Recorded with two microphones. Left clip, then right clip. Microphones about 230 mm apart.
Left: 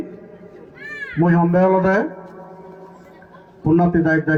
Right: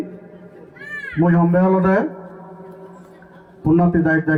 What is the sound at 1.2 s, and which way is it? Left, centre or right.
Speech, left.